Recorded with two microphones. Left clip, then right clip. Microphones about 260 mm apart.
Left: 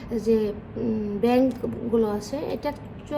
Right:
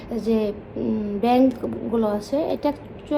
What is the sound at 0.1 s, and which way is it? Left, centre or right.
A woman's voice, right.